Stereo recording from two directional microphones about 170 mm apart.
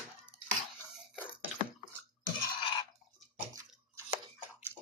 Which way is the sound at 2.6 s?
30° left (ahead or behind).